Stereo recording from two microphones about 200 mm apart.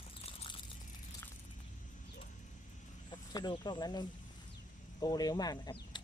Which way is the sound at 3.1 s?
20° left (ahead or behind).